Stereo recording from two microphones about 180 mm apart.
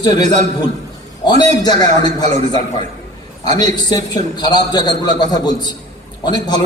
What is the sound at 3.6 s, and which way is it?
A man's voice, 20° left (ahead or behind).